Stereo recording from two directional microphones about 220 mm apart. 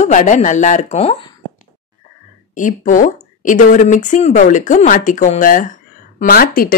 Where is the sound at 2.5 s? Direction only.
35° left (ahead or behind).